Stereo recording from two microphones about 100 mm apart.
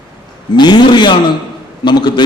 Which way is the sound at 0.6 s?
45° left (ahead or behind).